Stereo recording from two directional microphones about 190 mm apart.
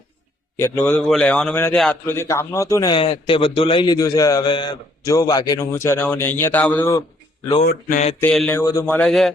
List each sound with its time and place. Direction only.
0.5 s a man's voice: 10° left (ahead or behind)
7.6 s speech: 45° left (ahead or behind)
8.2 s a man's voice: 5° left (ahead or behind)
8.5 s a man's voice: 15° left (ahead or behind)
8.9 s speech: 5° left (ahead or behind)